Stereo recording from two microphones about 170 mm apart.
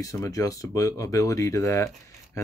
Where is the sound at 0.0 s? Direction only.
20° left (ahead or behind).